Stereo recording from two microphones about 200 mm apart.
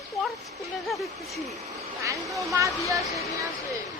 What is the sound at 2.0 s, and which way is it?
Speech, 15° right (ahead or behind).